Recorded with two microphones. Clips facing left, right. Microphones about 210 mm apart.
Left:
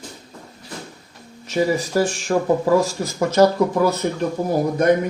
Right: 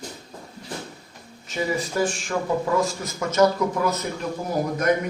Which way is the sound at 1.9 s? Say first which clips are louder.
Left 5 dB; 35° left (ahead or behind).